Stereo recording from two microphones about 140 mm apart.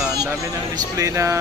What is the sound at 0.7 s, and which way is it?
Speech, 20° right (ahead or behind).